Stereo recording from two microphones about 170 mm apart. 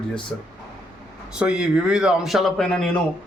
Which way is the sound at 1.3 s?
5° right (ahead or behind).